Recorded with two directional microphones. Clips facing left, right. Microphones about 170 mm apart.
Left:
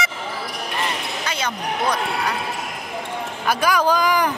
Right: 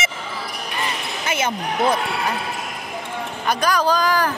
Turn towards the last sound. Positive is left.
turn(degrees=10)  # may be behind; listen again after turning